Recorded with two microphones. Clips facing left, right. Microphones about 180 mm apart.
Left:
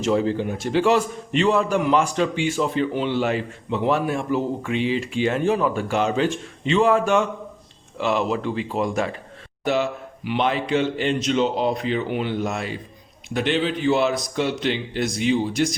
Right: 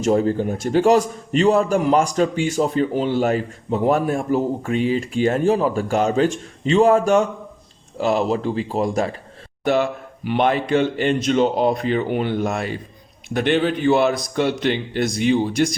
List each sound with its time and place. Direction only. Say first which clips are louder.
0.0 s a man's voice: right 3 dB; 45° right (ahead or behind)
9.6 s a man's voice: right 3 dB; 55° right (ahead or behind)